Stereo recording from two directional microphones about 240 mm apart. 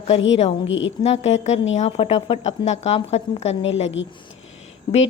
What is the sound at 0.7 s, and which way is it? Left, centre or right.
Speech, left.